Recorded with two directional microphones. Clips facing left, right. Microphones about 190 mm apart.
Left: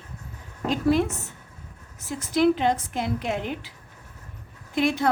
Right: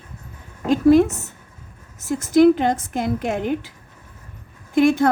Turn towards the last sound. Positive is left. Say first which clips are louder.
# right 7 dB
turn(degrees=-50)  # may be behind; listen again after turning